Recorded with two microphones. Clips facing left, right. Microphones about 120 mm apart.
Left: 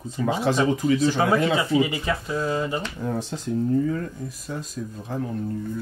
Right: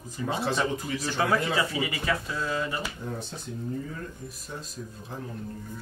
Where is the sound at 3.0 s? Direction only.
90° left.